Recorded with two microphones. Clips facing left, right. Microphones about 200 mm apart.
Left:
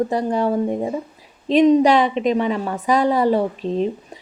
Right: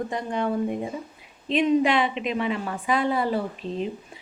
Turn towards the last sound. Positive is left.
turn(degrees=40)  # may be behind; listen again after turning